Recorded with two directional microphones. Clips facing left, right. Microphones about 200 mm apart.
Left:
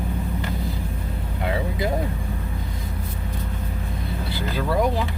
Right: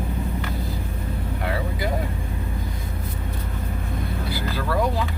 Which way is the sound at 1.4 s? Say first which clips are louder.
Left 3 dB; 20° left (ahead or behind).